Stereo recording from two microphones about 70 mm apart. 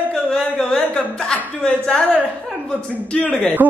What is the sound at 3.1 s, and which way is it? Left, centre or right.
Speech, left.